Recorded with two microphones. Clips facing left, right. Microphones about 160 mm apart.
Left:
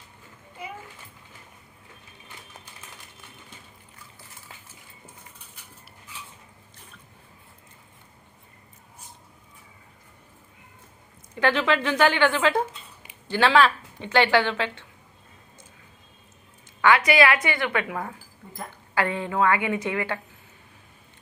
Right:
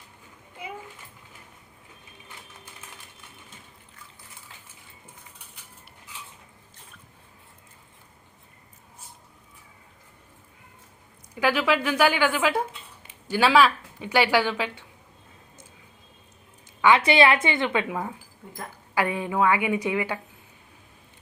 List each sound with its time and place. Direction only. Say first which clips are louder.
11.3 s a woman's voice: even; 10° right (ahead or behind)
16.8 s a woman's voice: right 1 dB; 25° right (ahead or behind)